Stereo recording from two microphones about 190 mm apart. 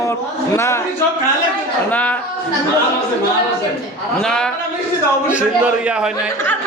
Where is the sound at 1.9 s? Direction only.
5° left (ahead or behind).